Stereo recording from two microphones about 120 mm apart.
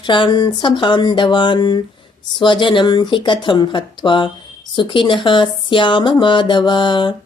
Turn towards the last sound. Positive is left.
turn(degrees=40)  # may be behind; listen again after turning